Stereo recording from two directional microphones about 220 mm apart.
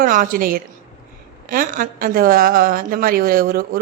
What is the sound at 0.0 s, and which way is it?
A woman's voice, 40° right (ahead or behind).